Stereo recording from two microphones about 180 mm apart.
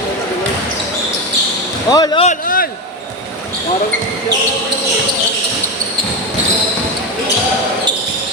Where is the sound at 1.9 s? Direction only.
25° left (ahead or behind).